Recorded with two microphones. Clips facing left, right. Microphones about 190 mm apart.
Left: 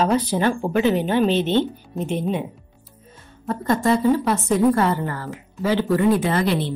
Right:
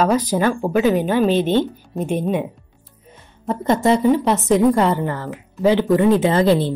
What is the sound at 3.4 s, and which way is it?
A woman's voice, 20° right (ahead or behind).